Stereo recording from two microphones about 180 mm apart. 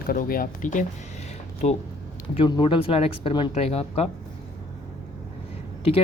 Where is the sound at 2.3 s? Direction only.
30° left (ahead or behind).